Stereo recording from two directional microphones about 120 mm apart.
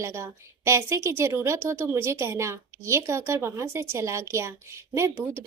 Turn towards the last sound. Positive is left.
turn(degrees=-20)  # may be behind; listen again after turning